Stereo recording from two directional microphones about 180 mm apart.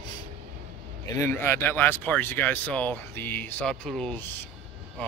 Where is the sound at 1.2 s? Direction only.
15° left (ahead or behind).